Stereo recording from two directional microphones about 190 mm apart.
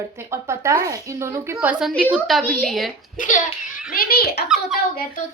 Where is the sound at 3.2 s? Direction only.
40° left (ahead or behind).